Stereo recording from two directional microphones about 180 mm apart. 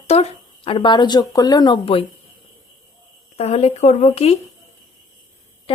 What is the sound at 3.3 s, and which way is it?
Speech, 35° left (ahead or behind).